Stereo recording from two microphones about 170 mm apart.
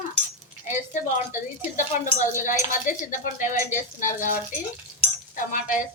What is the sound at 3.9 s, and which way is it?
Speech, 50° left (ahead or behind).